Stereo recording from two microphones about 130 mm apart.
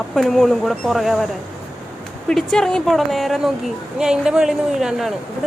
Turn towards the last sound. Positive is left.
turn(degrees=0)  # may be behind; listen again after turning